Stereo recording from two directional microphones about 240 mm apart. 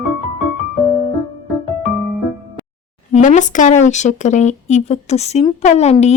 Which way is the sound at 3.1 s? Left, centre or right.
Left.